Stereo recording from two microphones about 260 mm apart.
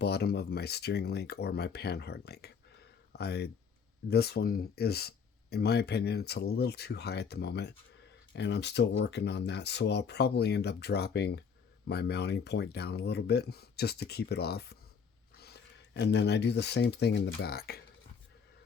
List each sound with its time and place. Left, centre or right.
0.0 s speech: left
16.0 s speech: left